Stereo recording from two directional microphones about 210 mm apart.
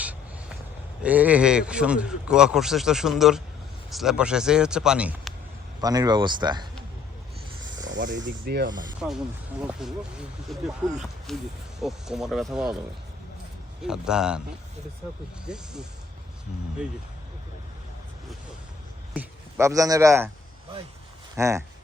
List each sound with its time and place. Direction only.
1.0 s a man's voice: 5° right (ahead or behind)
5.8 s speech: 20° right (ahead or behind)
7.9 s snake: 60° right (ahead or behind)
8.4 s speech: 50° right (ahead or behind)
9.0 s a man's voice: 5° right (ahead or behind)
13.8 s a man's voice: 5° right (ahead or behind)
15.4 s a man's voice: 5° right (ahead or behind)
19.1 s speech: 10° right (ahead or behind)
21.3 s speech: 15° right (ahead or behind)